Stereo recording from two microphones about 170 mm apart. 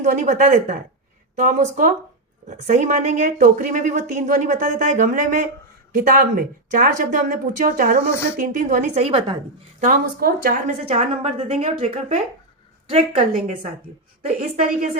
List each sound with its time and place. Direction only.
0.0 s speech: 45° right (ahead or behind)
9.8 s speech: 60° right (ahead or behind)
10.8 s a woman's voice: 40° right (ahead or behind)
13.8 s a woman's voice: 55° right (ahead or behind)